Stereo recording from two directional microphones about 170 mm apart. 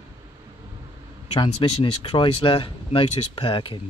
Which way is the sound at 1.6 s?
25° left (ahead or behind).